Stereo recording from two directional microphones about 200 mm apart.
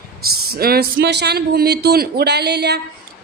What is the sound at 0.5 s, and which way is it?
A woman's voice, 50° right (ahead or behind).